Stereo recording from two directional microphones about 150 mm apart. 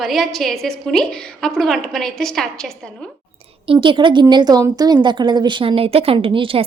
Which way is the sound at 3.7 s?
35° right (ahead or behind).